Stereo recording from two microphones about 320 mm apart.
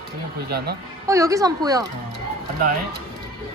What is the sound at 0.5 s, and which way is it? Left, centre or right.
Speech, right.